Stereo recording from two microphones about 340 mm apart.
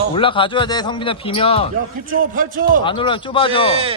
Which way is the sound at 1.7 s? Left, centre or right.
Right.